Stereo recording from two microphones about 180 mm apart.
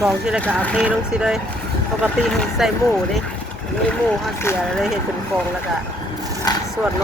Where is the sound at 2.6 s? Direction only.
5° right (ahead or behind).